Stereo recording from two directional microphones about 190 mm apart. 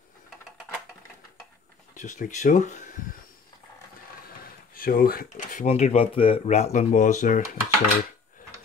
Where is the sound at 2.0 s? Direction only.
45° left (ahead or behind).